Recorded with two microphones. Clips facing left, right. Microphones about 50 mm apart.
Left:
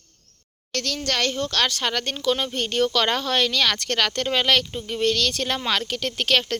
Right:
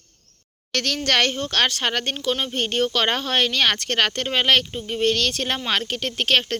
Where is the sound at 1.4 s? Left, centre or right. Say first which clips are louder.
Right 2 dB; right.